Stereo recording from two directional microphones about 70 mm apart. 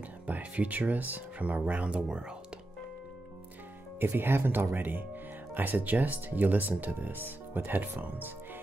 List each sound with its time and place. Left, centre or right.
0.3 s speech: right
4.0 s speech: right